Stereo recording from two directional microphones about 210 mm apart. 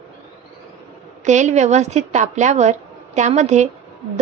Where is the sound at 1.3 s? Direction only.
35° right (ahead or behind).